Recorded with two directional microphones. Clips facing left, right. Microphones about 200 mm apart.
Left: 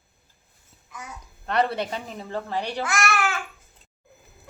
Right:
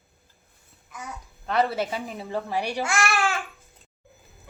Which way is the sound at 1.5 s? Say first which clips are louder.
Even; centre (ahead or behind).